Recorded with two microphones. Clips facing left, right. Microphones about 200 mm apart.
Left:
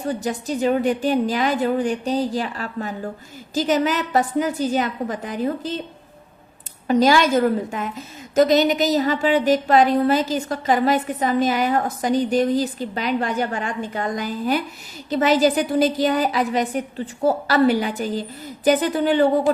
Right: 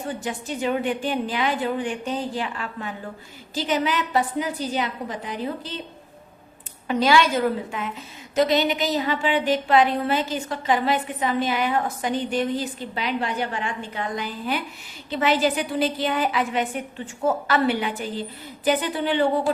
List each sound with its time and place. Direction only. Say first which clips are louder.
0.1 s a woman's voice: left 7 dB; 40° left (ahead or behind)
6.8 s a woman's voice: left 3 dB; 40° left (ahead or behind)